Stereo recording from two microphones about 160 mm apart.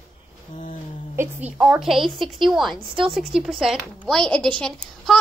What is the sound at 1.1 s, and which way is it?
A woman's voice, 10° right (ahead or behind).